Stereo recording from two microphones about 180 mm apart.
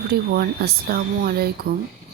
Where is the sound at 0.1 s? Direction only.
60° right (ahead or behind).